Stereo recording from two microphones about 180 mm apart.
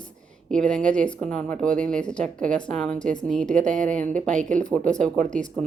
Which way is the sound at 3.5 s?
45° right (ahead or behind).